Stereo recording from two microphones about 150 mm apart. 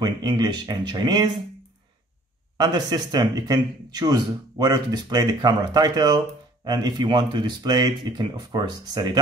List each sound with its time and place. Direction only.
0.0 s speech: 25° right (ahead or behind)
2.5 s speech: 30° right (ahead or behind)